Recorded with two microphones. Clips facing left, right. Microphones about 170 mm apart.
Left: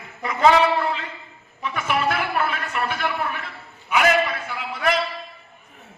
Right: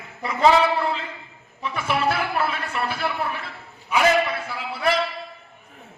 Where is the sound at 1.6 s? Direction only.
30° right (ahead or behind).